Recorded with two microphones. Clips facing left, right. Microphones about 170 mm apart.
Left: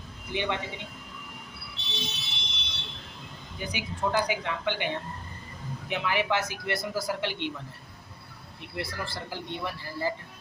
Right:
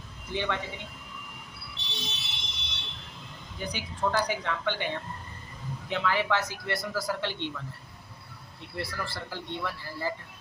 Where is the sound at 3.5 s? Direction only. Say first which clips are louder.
Even; 10° left (ahead or behind).